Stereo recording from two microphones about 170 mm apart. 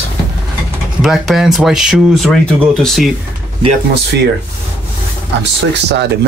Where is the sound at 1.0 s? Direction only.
Centre (ahead or behind).